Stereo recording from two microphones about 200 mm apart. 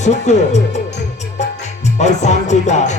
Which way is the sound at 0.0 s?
35° left (ahead or behind).